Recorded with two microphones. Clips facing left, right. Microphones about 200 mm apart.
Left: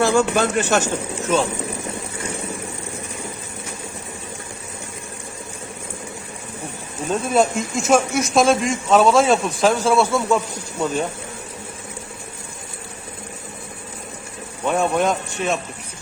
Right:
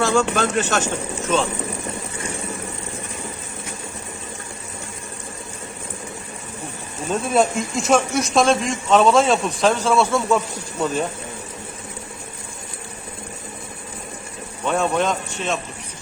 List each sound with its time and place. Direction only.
0.0 s a man's voice: 10° left (ahead or behind)
7.1 s speech: centre (ahead or behind)
14.7 s a man's voice: 10° left (ahead or behind)